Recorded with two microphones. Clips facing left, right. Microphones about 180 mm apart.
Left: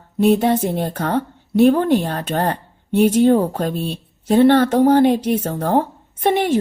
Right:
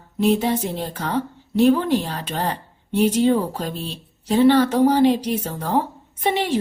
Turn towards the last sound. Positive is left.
turn(degrees=50)  # may be behind; listen again after turning